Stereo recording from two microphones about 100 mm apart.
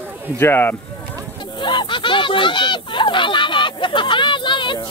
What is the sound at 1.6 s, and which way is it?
Speech, 55° left (ahead or behind).